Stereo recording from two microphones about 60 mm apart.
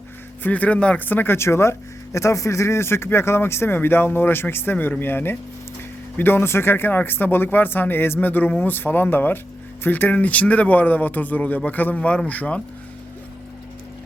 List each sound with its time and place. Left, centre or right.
0.4 s speech: left
0.9 s speech: left
2.1 s speech: left